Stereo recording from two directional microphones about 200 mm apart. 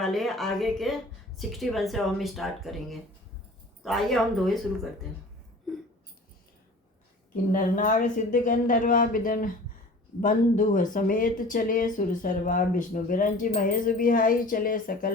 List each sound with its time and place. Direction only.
0.0 s speech: centre (ahead or behind)
7.5 s speech: 40° left (ahead or behind)